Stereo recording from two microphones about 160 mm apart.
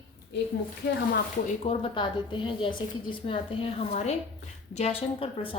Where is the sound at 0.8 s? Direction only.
90° left.